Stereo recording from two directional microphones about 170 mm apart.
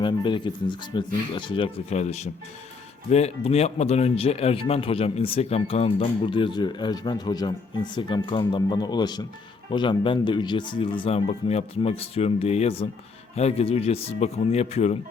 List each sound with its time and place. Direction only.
0.0 s speech: 30° left (ahead or behind)